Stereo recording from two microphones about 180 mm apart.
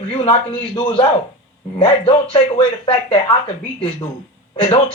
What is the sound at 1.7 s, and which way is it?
A man's voice, 25° left (ahead or behind).